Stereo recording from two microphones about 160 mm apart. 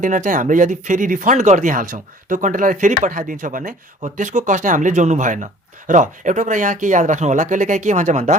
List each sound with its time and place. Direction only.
0.0 s speech: 55° right (ahead or behind)